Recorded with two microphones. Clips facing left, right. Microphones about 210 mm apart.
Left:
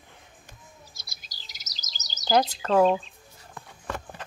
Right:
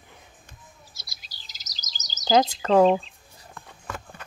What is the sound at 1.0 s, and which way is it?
Chirp, 50° left (ahead or behind).